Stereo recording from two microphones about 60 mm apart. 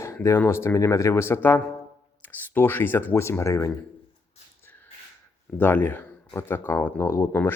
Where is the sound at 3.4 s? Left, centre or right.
Left.